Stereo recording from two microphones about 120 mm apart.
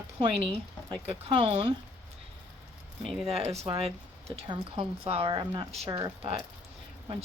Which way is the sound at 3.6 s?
55° right (ahead or behind).